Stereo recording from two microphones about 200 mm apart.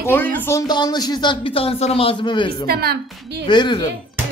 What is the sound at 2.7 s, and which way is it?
Speech, 50° right (ahead or behind).